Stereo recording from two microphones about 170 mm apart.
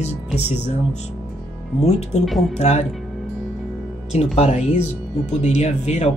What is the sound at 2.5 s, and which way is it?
Speech, 40° left (ahead or behind).